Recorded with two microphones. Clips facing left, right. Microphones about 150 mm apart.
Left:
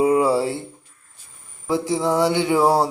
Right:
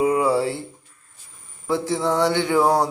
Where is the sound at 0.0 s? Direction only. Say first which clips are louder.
Left 2 dB; 25° left (ahead or behind).